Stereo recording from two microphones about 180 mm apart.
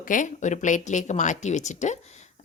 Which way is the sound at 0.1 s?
45° left (ahead or behind).